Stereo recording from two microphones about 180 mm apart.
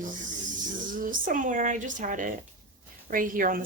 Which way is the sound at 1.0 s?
50° right (ahead or behind).